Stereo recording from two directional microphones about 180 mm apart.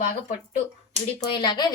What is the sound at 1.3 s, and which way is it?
Speech, 25° left (ahead or behind).